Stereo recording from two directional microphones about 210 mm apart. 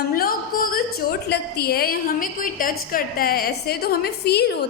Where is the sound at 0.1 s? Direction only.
45° left (ahead or behind).